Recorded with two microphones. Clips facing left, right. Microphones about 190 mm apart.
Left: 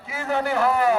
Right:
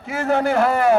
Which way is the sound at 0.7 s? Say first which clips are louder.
Right 4 dB; 75° right (ahead or behind).